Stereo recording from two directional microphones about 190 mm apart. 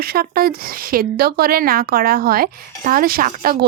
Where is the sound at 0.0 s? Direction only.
55° right (ahead or behind).